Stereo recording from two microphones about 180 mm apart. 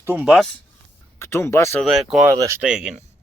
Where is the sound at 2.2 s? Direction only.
15° right (ahead or behind).